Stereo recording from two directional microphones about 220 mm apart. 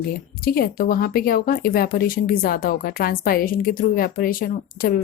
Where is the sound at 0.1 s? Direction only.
40° left (ahead or behind).